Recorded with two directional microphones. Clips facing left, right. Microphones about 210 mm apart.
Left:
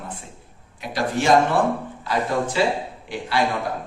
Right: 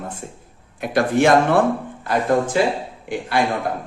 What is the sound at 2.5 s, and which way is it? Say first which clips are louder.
Speech: right 2 dB; 50° right (ahead or behind).